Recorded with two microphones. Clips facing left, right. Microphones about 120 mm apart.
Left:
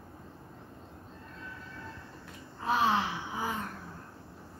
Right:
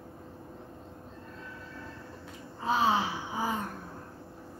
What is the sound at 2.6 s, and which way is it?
Gasp, centre (ahead or behind).